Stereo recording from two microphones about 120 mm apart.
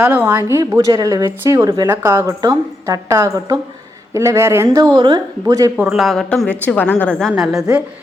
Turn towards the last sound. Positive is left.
turn(degrees=-5)  # may be behind; listen again after turning